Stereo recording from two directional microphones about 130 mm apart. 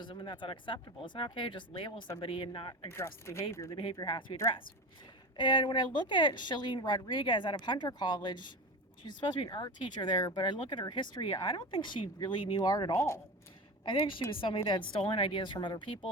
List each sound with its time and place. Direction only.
0.0 s speech: 35° left (ahead or behind)
2.9 s speech: 20° left (ahead or behind)
3.9 s speech: 35° left (ahead or behind)
5.4 s speech: 35° left (ahead or behind); by 13.2 s 20° left (ahead or behind)
13.8 s speech: 40° left (ahead or behind)